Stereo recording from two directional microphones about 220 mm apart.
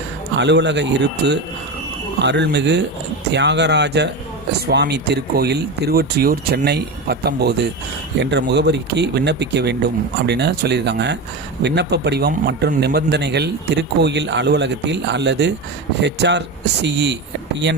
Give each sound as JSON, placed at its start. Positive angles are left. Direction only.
{"t": 0.3, "sound": "a man's voice", "side_deg": -50}